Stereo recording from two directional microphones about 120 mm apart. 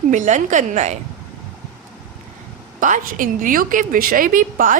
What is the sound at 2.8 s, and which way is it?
Speech, 90° right.